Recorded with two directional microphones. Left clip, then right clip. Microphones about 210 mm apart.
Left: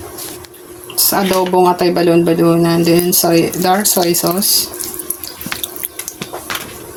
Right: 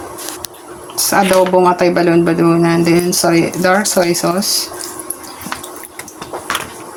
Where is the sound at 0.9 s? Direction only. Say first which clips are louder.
Right 3 dB; 5° left (ahead or behind).